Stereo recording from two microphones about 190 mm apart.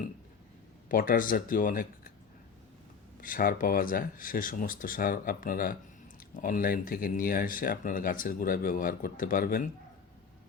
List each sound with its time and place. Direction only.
0.9 s speech: 45° left (ahead or behind)
3.2 s speech: 50° left (ahead or behind)